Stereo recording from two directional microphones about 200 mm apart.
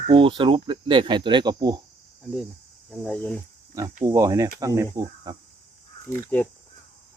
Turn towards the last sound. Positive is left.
turn(degrees=10)  # may be behind; listen again after turning